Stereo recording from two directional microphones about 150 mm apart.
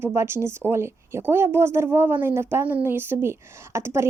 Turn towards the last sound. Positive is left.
turn(degrees=-15)  # may be behind; listen again after turning